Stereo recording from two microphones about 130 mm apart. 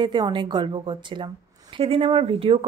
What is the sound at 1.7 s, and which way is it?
Speech, 50° right (ahead or behind).